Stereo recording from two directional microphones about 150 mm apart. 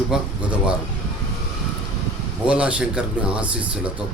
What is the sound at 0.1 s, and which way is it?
Speech, 5° right (ahead or behind).